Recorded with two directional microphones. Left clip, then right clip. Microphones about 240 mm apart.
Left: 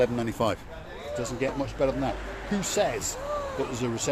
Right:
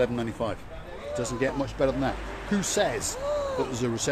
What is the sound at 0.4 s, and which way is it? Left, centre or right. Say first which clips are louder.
Speech: left 5 dB; left.